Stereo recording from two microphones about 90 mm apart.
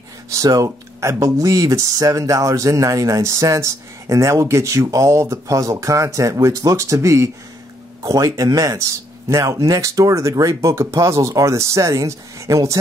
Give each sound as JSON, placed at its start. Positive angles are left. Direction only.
{"t": 0.3, "sound": "speech", "side_deg": -40}